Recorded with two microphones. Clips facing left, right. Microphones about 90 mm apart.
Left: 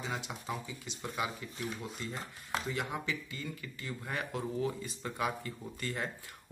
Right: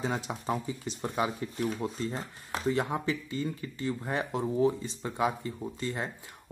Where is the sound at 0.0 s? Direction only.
40° right (ahead or behind).